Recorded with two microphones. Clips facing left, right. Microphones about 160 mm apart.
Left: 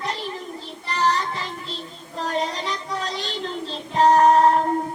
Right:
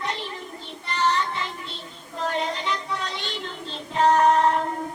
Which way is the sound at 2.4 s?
40° left (ahead or behind).